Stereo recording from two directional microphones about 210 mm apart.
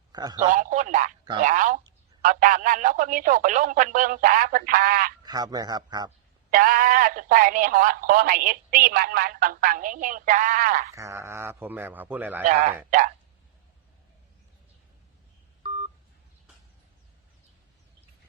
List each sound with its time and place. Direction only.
0.1 s a man's voice: 20° right (ahead or behind)
0.5 s speech: 40° right (ahead or behind)
5.2 s speech: 20° right (ahead or behind)
6.5 s speech: 40° right (ahead or behind)
10.9 s speech: 15° right (ahead or behind)
12.9 s speech: 40° right (ahead or behind)
15.6 s telephone dialing: 25° right (ahead or behind)